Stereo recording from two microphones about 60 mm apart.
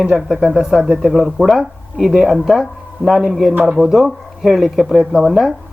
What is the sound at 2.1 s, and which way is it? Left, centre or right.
Speech, centre.